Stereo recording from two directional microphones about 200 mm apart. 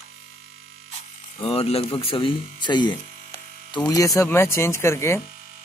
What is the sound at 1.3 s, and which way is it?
Speech, 30° left (ahead or behind).